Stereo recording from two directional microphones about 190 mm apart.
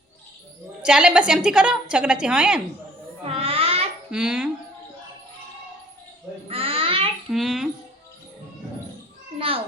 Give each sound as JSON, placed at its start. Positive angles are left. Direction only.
{"t": 0.8, "sound": "a woman's voice", "side_deg": -5}
{"t": 3.2, "sound": "music", "side_deg": -30}
{"t": 4.1, "sound": "a woman's voice", "side_deg": -5}
{"t": 6.5, "sound": "babbling", "side_deg": -30}
{"t": 7.3, "sound": "a woman's voice", "side_deg": 0}